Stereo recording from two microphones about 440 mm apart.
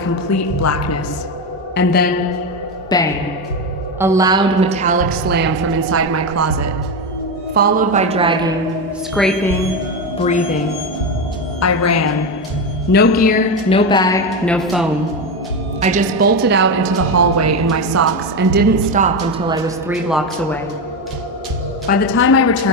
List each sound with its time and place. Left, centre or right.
0.3 s speech: left
1.7 s a woman's voice: left
2.9 s speech: centre
4.0 s a woman's voice: centre; by 6.7 s right
7.5 s speech: centre
9.1 s a woman's voice: centre
10.2 s speech: centre
11.6 s speech: left
12.9 s a woman's voice: left; by 14.8 s centre
15.8 s a woman's voice: centre; by 18.0 s right
18.3 s speech: right; by 20.6 s centre
21.8 s a woman's voice: left